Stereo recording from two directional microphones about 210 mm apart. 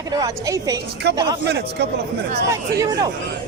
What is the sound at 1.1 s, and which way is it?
Speech, 50° right (ahead or behind).